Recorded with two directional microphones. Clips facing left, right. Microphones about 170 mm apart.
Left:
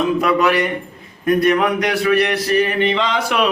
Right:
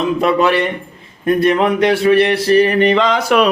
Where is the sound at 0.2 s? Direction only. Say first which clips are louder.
Right 2 dB; 25° right (ahead or behind).